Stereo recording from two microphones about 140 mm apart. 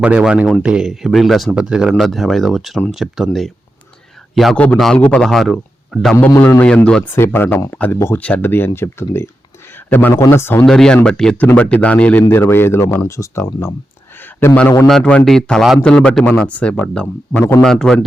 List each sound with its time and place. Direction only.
0.0 s speech: 10° right (ahead or behind)
6.1 s a man's voice: 15° left (ahead or behind)
10.7 s speech: 5° left (ahead or behind)
14.2 s a sound: 15° left (ahead or behind)
14.8 s speech: 5° left (ahead or behind)